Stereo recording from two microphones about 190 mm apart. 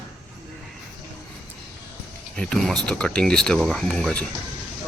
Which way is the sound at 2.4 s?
5° left (ahead or behind).